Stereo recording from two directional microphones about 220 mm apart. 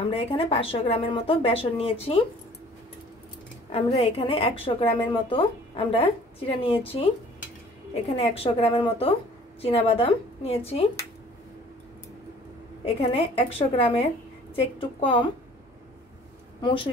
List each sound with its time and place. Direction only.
0.0 s a woman's voice: 25° left (ahead or behind)
3.7 s a woman's voice: 25° left (ahead or behind)
12.8 s a woman's voice: 25° left (ahead or behind)
16.6 s a woman's voice: 20° left (ahead or behind)